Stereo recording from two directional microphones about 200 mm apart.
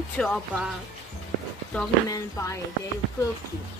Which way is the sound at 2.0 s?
15° left (ahead or behind).